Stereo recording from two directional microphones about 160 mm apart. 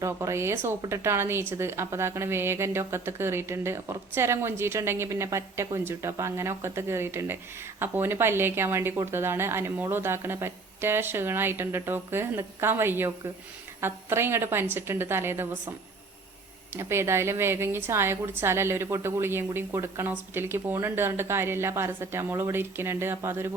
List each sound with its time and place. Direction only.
0.0 s speech: 20° right (ahead or behind)
16.7 s speech: 15° right (ahead or behind)